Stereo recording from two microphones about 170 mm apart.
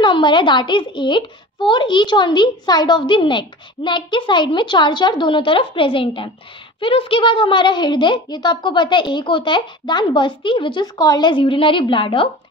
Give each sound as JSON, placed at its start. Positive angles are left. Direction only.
{"t": 0.0, "sound": "a woman's voice", "side_deg": 30}